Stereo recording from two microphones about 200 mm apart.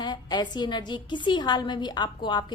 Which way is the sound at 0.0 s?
20° left (ahead or behind).